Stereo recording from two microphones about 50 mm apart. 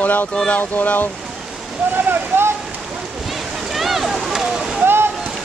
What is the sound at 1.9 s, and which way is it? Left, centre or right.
Speech, right.